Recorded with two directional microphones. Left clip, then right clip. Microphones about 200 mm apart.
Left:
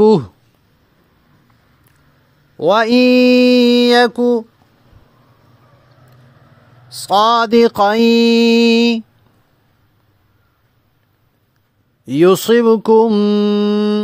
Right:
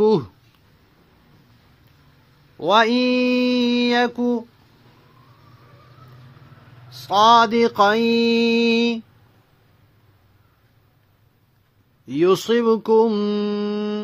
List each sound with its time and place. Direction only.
0.0 s speech: 40° left (ahead or behind)
2.5 s mantra: 45° left (ahead or behind)
6.9 s mantra: 55° left (ahead or behind)
12.1 s mantra: 50° left (ahead or behind)